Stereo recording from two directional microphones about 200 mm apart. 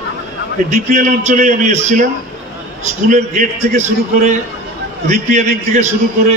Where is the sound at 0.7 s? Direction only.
35° right (ahead or behind).